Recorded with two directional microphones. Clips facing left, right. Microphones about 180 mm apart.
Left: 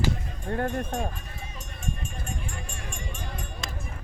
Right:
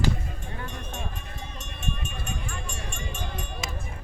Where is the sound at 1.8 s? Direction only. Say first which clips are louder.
Right 1 dB; 70° right (ahead or behind).